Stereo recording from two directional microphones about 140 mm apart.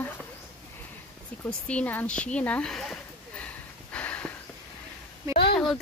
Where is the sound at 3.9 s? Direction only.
10° left (ahead or behind).